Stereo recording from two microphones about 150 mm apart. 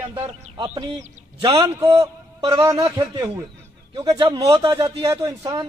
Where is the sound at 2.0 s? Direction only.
25° right (ahead or behind).